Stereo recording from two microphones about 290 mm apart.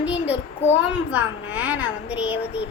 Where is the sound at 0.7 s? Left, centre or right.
Left.